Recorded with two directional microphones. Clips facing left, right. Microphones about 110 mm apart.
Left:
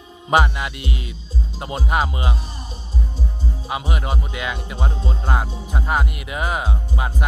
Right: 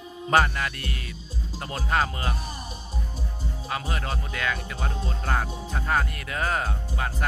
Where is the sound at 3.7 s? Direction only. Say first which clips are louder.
Left 4 dB; 15° left (ahead or behind).